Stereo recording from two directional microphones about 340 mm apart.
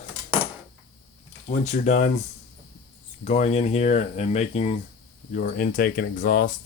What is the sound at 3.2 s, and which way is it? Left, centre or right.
Speech, centre.